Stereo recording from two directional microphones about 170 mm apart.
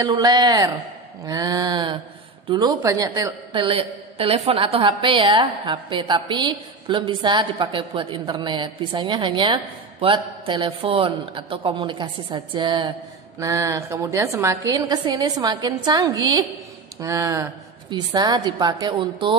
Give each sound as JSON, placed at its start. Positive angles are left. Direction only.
{"t": 0.0, "sound": "a woman's voice", "side_deg": -25}